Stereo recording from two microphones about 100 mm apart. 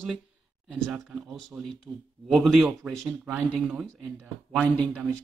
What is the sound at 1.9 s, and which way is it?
Speech, 30° right (ahead or behind).